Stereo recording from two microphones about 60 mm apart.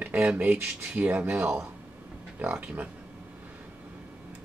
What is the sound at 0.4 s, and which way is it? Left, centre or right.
Speech, right.